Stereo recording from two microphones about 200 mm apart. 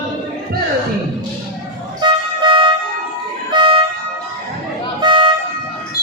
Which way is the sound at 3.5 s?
25° right (ahead or behind).